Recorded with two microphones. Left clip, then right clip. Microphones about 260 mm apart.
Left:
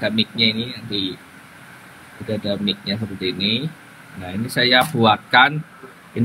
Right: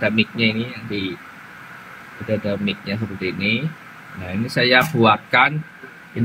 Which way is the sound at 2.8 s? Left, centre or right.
Centre.